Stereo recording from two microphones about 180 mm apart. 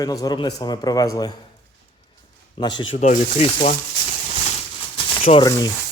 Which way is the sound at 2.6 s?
25° left (ahead or behind).